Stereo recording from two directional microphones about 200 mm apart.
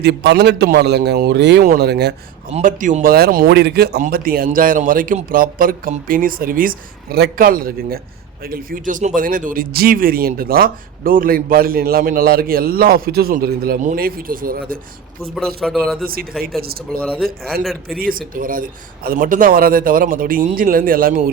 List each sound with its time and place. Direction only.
0.0 s a man's voice: 55° right (ahead or behind)
2.5 s speech: 40° right (ahead or behind)
15.4 s speech: centre (ahead or behind)
16.6 s speech: 50° right (ahead or behind)